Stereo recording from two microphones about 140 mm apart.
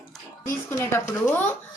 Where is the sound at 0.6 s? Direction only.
20° left (ahead or behind).